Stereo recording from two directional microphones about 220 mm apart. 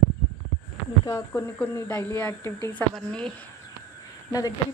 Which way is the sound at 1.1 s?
10° left (ahead or behind).